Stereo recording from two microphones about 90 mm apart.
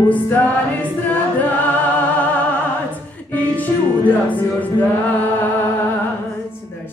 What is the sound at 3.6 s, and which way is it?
Music, 20° left (ahead or behind).